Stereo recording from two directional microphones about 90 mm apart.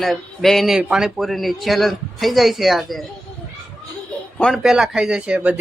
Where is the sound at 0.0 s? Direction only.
Centre (ahead or behind).